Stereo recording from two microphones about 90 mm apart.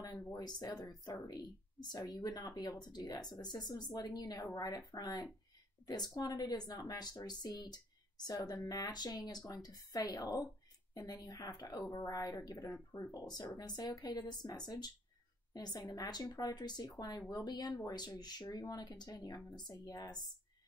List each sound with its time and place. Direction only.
0.5 s speech: 50° left (ahead or behind)